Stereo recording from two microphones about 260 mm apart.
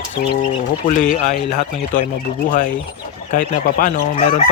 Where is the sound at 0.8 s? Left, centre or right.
Left.